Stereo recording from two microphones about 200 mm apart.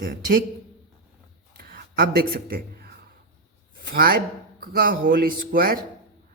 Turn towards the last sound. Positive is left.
turn(degrees=-45)  # may be behind; listen again after turning